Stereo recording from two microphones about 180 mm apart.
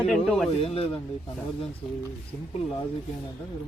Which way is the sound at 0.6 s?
30° left (ahead or behind).